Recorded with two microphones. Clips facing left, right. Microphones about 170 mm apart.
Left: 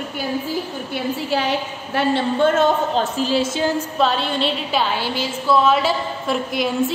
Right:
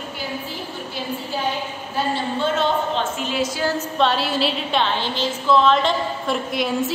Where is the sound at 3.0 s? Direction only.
35° left (ahead or behind).